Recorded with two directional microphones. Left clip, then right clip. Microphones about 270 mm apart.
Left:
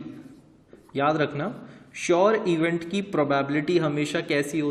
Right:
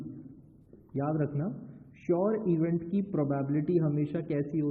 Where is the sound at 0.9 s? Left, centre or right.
Centre.